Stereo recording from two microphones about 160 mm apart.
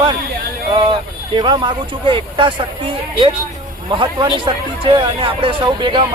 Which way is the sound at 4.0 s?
30° right (ahead or behind).